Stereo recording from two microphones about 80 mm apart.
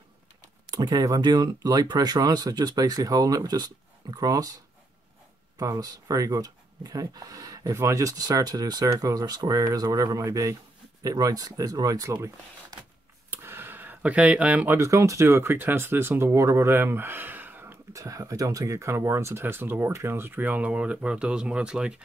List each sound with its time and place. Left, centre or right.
0.7 s speech: right
5.6 s speech: right
13.3 s a sound: right
14.8 s speech: right
17.9 s speech: right; by 22.0 s centre